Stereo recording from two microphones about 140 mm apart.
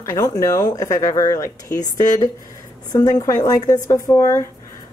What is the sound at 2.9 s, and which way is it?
Speech, 25° left (ahead or behind).